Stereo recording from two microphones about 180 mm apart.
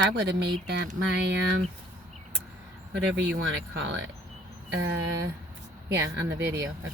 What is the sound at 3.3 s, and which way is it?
Speech, 85° right.